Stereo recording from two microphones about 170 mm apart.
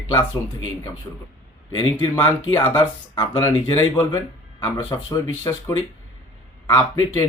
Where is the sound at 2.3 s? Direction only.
15° left (ahead or behind).